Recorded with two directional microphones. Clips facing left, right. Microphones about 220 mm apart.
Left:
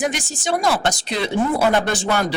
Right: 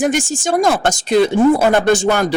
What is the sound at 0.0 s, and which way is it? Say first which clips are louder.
Speech: right 7 dB; 45° right (ahead or behind).